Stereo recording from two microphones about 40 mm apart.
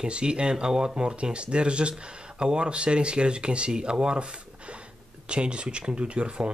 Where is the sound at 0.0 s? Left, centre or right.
Right.